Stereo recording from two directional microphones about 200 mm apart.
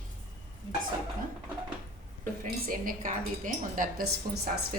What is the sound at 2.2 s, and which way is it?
A woman's voice, 45° right (ahead or behind).